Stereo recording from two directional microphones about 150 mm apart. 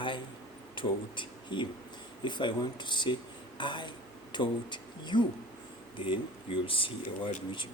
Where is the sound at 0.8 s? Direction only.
35° left (ahead or behind).